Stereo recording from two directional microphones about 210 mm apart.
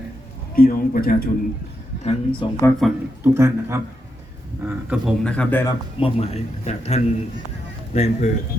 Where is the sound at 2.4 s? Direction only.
25° left (ahead or behind).